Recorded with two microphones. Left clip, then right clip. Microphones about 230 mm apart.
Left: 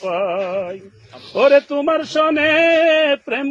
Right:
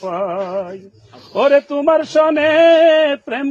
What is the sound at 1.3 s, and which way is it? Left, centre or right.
Speech, right.